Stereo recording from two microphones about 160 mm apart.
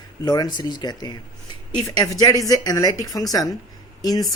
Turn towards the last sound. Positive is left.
turn(degrees=25)  # may be behind; listen again after turning